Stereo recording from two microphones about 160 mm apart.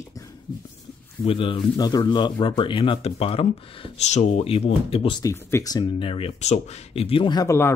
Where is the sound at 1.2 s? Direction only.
35° left (ahead or behind).